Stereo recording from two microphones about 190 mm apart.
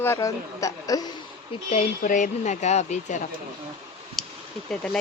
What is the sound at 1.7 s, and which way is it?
Speech, 40° left (ahead or behind).